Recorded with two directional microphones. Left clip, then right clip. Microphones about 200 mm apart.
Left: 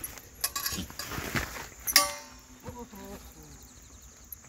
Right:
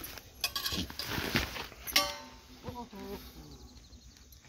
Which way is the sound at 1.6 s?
Centre (ahead or behind).